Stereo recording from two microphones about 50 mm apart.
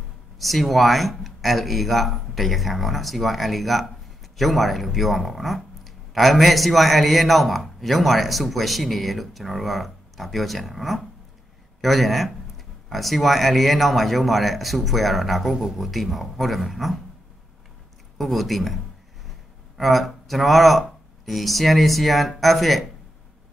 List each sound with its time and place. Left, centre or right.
0.4 s speech: centre
18.1 s speech: centre
19.8 s speech: centre